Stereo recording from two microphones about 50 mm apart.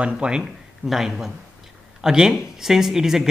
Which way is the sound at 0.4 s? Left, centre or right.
Centre.